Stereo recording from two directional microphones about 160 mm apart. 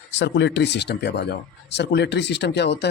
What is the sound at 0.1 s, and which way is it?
Speech, 90° left.